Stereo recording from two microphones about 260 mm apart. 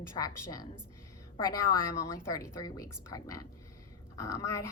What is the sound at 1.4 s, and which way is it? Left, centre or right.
Speech, centre.